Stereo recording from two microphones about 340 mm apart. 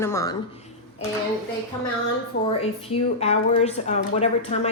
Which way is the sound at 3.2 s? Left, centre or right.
Centre.